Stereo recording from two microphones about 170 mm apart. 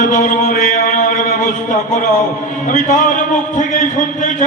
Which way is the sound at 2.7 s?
45° left (ahead or behind).